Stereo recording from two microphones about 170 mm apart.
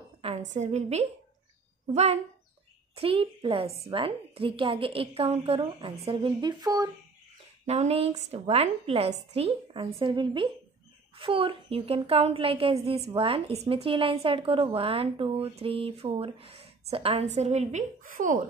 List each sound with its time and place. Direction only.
0.2 s a sound: 35° right (ahead or behind)
0.6 s a woman's voice: 40° right (ahead or behind)
3.0 s a woman's voice: 30° right (ahead or behind)
7.6 s a woman's voice: 40° right (ahead or behind)